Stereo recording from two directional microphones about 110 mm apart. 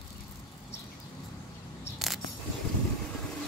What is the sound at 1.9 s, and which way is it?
Coin, centre (ahead or behind).